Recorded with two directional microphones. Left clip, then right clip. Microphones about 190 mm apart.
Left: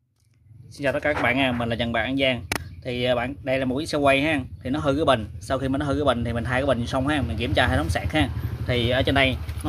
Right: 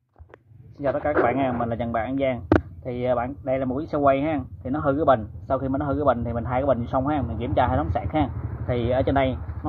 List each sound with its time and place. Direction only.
0.7 s speech: 25° left (ahead or behind)